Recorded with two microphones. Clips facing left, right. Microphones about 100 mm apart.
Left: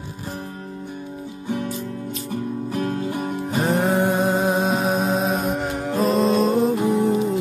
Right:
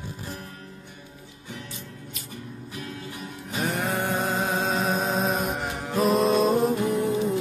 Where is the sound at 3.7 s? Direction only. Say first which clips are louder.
Left 8 dB; 20° left (ahead or behind).